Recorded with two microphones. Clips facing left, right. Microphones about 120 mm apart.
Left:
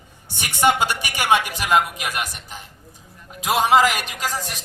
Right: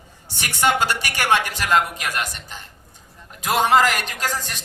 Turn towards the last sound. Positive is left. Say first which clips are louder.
# even
turn(degrees=5)  # may be behind; listen again after turning